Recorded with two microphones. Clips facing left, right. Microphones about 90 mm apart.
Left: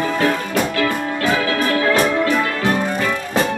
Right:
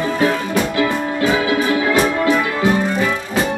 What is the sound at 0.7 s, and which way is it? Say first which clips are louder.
Music: right 2 dB; 20° right (ahead or behind).